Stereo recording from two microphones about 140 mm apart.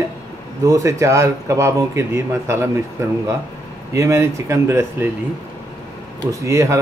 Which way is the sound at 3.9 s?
20° right (ahead or behind).